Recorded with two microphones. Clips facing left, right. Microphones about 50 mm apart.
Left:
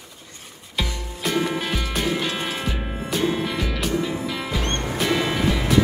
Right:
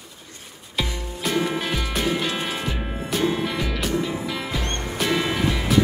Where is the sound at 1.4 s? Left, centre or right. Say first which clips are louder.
Even; centre.